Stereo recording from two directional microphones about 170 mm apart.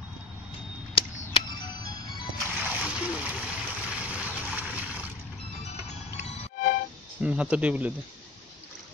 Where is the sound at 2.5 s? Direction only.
10° right (ahead or behind).